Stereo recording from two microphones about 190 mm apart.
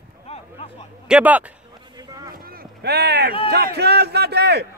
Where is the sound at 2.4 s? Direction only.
55° right (ahead or behind).